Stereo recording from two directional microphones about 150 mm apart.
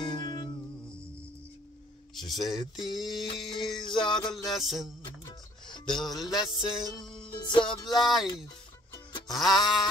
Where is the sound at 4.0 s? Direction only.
30° left (ahead or behind).